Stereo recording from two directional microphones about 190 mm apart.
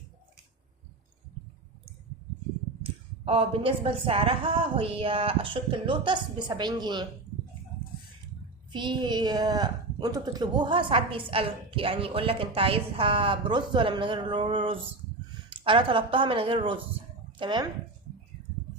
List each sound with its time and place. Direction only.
2.8 s a woman's voice: 30° right (ahead or behind)
8.7 s a woman's voice: 25° right (ahead or behind)